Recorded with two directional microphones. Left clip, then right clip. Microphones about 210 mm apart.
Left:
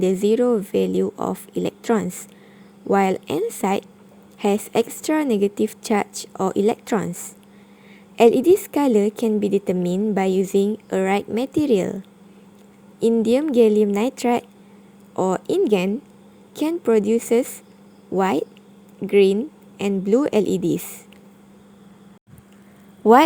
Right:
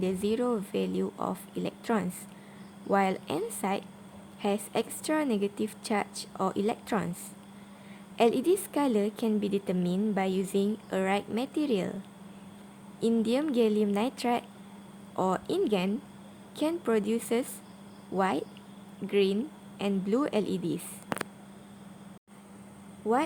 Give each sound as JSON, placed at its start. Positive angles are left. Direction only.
{"t": 0.0, "sound": "a woman's voice", "side_deg": 25}
{"t": 13.2, "sound": "a woman's voice", "side_deg": 25}